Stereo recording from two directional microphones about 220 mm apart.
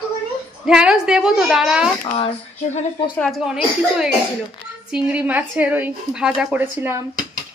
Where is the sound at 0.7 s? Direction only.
5° right (ahead or behind).